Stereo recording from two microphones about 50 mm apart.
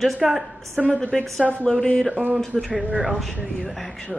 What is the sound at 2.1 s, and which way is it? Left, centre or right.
A woman's voice, right.